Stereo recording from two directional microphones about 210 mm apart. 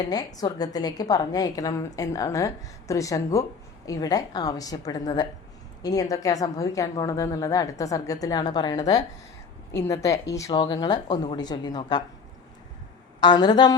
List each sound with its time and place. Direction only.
0.3 s a woman's voice: 15° left (ahead or behind)
13.1 s a woman's voice: 20° left (ahead or behind)